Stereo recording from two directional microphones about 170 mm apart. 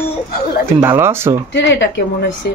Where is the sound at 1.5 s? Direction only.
90° left.